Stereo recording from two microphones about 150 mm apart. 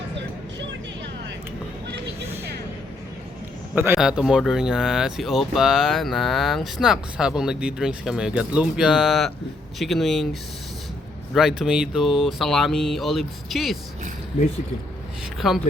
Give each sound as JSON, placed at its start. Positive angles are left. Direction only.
{"t": 3.9, "sound": "speech", "side_deg": -5}
{"t": 11.3, "sound": "speech", "side_deg": -5}
{"t": 14.3, "sound": "speech", "side_deg": 45}
{"t": 15.4, "sound": "speech", "side_deg": 0}